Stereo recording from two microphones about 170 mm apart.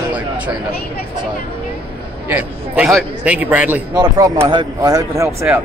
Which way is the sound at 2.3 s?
10° right (ahead or behind).